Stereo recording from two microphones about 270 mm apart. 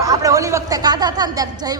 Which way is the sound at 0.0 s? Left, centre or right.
Centre.